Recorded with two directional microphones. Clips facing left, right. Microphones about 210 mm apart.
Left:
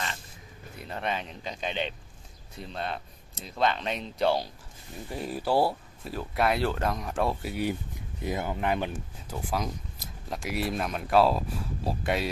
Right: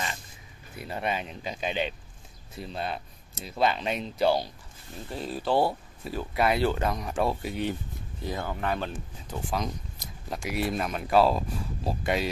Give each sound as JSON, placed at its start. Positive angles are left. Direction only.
{"t": 0.7, "sound": "speech", "side_deg": -5}
{"t": 5.1, "sound": "speech", "side_deg": 10}
{"t": 8.2, "sound": "speech", "side_deg": 15}